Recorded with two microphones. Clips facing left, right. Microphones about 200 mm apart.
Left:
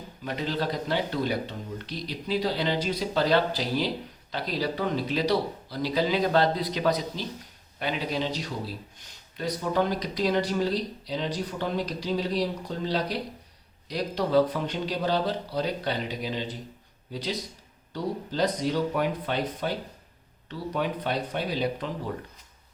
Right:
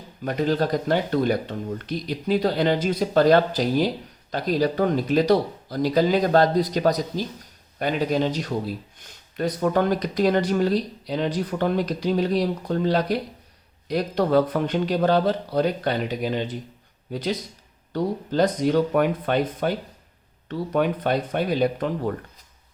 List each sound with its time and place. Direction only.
0.3 s speech: 50° right (ahead or behind)